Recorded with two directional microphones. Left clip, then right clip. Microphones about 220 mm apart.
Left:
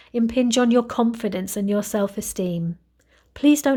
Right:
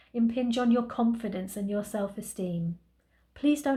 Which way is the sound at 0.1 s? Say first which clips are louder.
Left 8 dB; 50° left (ahead or behind).